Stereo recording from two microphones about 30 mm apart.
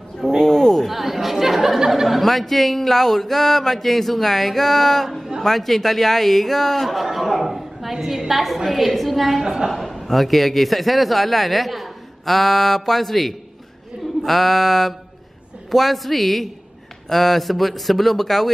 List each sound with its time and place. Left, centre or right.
0.4 s a sound: centre
0.8 s chatter: centre
2.0 s speech: centre
7.2 s a sound: centre
8.3 s speech: centre
9.4 s a woman's voice: centre
10.0 s speech: centre